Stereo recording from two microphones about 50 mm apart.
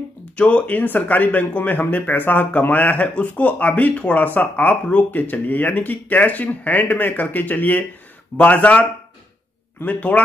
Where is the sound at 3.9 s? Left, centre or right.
Left.